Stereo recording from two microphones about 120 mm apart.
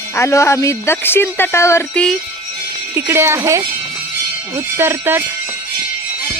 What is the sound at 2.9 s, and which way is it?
Speech, 20° right (ahead or behind).